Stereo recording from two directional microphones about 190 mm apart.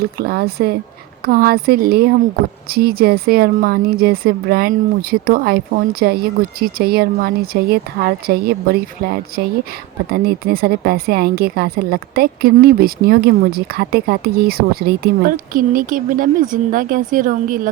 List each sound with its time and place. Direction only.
0.0 s a woman's voice: 55° right (ahead or behind)